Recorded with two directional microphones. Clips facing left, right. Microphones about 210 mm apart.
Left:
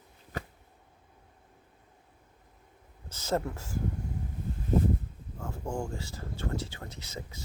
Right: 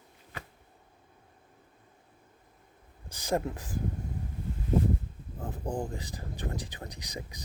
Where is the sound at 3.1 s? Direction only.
15° right (ahead or behind).